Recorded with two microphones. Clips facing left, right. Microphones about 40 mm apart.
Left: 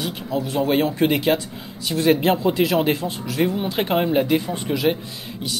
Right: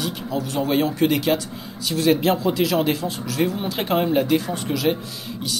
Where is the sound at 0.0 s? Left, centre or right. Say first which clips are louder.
Left 1 dB; left.